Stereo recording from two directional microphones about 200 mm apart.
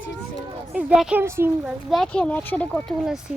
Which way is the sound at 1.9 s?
5° left (ahead or behind).